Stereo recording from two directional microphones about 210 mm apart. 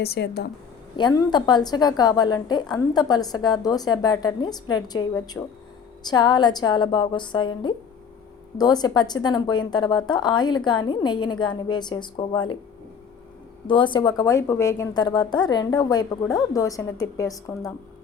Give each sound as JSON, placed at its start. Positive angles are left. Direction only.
{"t": 0.0, "sound": "speech", "side_deg": 50}
{"t": 0.9, "sound": "a woman's voice", "side_deg": 20}
{"t": 13.7, "sound": "a woman's voice", "side_deg": 20}